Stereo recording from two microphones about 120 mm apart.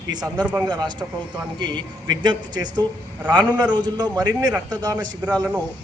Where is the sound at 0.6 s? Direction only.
35° right (ahead or behind).